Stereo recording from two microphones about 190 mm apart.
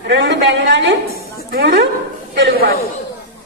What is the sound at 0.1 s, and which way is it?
Speech, 65° right (ahead or behind).